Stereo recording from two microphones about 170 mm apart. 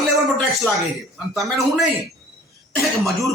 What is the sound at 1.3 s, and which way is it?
Speech, centre (ahead or behind).